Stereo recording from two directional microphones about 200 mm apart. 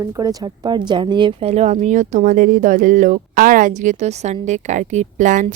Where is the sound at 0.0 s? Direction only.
20° right (ahead or behind).